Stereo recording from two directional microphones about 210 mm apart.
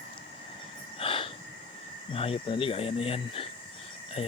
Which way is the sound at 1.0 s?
25° left (ahead or behind).